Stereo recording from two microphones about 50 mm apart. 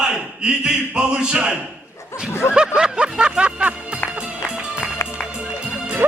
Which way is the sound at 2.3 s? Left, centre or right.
Left.